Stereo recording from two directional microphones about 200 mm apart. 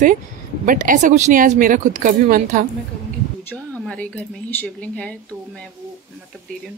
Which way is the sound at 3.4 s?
5° left (ahead or behind).